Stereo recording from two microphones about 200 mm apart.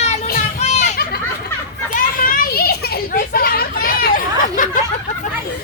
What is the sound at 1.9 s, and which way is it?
Children playing, 45° left (ahead or behind).